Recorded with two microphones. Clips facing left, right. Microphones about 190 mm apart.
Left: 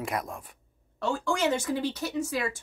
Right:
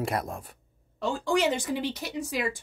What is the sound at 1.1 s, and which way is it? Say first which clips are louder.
Speech: right 1 dB; 15° right (ahead or behind).